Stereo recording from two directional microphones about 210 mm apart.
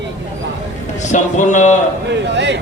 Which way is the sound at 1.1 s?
35° left (ahead or behind).